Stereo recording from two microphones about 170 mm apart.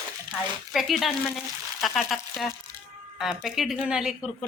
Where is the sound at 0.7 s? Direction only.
Centre (ahead or behind).